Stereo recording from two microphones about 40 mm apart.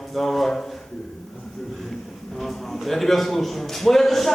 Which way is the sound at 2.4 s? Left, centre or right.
Centre.